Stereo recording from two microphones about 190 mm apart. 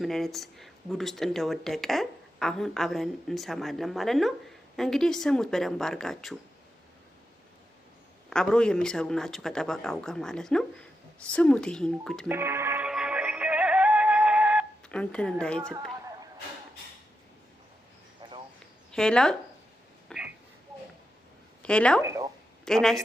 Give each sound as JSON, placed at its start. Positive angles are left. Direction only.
{"t": 0.0, "sound": "speech", "side_deg": 0}
{"t": 8.3, "sound": "speech", "side_deg": 5}
{"t": 12.3, "sound": "music", "side_deg": -10}
{"t": 14.8, "sound": "speech", "side_deg": 5}
{"t": 18.2, "sound": "a sound", "side_deg": -25}
{"t": 18.9, "sound": "speech", "side_deg": 5}
{"t": 20.1, "sound": "a sound", "side_deg": -5}
{"t": 21.6, "sound": "a woman's voice", "side_deg": 5}
{"t": 22.0, "sound": "speech", "side_deg": -15}
{"t": 22.6, "sound": "speech", "side_deg": 0}